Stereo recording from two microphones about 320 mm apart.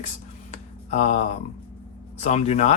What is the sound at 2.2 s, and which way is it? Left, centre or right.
Speech, centre.